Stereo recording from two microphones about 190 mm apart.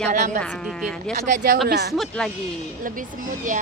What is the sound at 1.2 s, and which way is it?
Speech, 50° right (ahead or behind).